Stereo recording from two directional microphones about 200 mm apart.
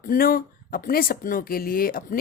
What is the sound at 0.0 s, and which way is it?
Speech, 45° left (ahead or behind).